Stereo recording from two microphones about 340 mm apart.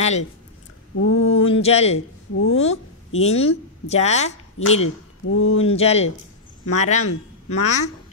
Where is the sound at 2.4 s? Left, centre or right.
Left.